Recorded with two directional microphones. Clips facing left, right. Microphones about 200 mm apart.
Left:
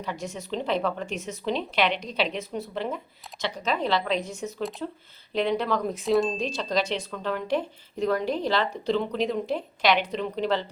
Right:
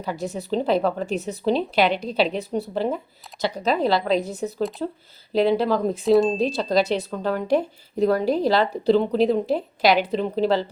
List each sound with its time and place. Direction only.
0.0 s a woman's voice: 35° right (ahead or behind)
6.0 s speech: centre (ahead or behind)
6.3 s a woman's voice: 35° right (ahead or behind)